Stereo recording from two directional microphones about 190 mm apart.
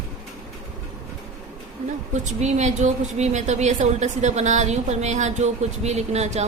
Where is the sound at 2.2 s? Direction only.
40° right (ahead or behind).